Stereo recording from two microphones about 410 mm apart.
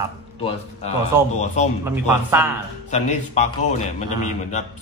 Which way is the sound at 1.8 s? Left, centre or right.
Centre.